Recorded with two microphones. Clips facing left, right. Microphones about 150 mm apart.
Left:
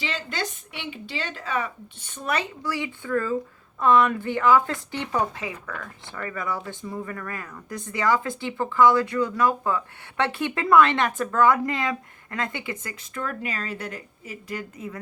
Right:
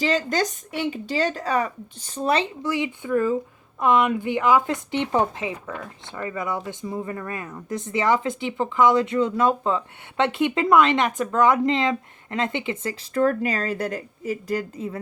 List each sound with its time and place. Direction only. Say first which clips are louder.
0.0 s speech: right 8 dB; 40° right (ahead or behind)